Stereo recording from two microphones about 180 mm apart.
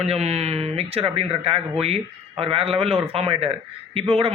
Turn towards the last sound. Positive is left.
turn(degrees=-30)  # may be behind; listen again after turning